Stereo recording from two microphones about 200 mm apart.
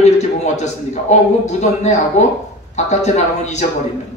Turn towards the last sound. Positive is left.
turn(degrees=35)  # may be behind; listen again after turning